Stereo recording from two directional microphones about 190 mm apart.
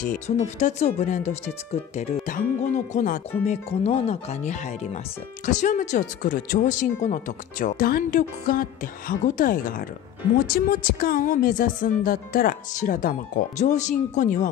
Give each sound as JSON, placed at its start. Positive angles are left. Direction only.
{"t": 0.0, "sound": "speech", "side_deg": 40}